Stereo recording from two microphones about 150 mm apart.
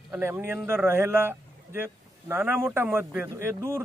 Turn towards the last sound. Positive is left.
turn(degrees=-20)  # may be behind; listen again after turning